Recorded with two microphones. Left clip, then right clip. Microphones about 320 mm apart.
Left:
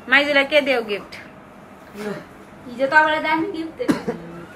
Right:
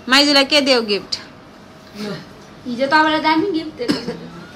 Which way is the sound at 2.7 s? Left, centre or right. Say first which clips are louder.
Right 1 dB; right.